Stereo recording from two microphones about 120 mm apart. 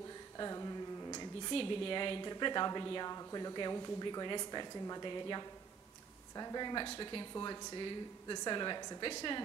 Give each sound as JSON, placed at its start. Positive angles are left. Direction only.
{"t": 0.4, "sound": "music", "side_deg": 30}
{"t": 1.5, "sound": "a woman's voice", "side_deg": 50}